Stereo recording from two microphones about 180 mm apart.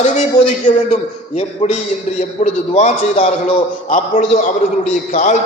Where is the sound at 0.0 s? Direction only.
40° left (ahead or behind).